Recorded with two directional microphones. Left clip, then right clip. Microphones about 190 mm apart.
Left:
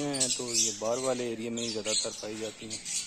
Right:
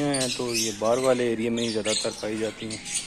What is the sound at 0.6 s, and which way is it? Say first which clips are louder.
Speech: right 6 dB; 5° left (ahead or behind).